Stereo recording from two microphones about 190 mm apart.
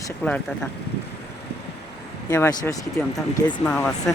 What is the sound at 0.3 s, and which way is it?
Speech, 5° left (ahead or behind).